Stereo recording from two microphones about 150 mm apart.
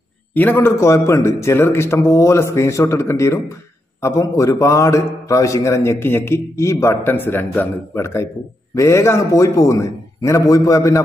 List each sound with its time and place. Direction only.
0.3 s a man's voice: 10° left (ahead or behind)